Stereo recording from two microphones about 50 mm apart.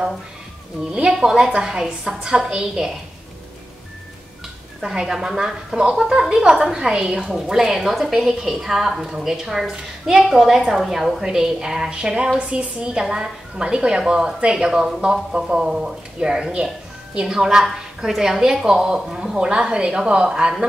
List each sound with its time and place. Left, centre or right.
0.9 s a woman's voice: centre
4.8 s a woman's voice: centre